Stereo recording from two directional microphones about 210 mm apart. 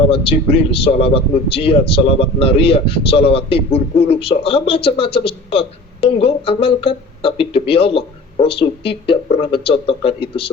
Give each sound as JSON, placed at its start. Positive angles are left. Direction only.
{"t": 0.1, "sound": "a man's voice", "side_deg": 25}